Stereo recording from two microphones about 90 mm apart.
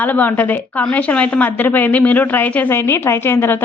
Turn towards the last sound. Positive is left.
turn(degrees=25)  # may be behind; listen again after turning